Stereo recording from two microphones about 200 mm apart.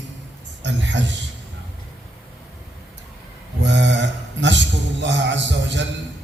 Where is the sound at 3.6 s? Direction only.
60° right (ahead or behind).